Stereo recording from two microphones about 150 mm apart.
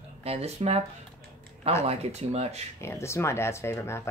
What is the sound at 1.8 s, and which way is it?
Speech, 45° right (ahead or behind).